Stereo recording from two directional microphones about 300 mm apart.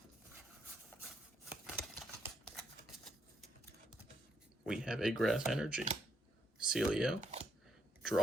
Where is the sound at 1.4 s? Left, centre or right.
Centre.